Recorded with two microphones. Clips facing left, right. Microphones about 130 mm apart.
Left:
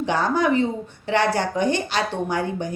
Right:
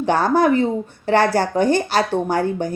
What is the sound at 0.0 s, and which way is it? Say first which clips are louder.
Music: right 5 dB; 45° right (ahead or behind).